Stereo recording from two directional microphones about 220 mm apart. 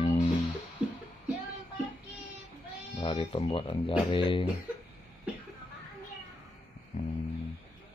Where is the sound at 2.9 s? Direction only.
25° left (ahead or behind).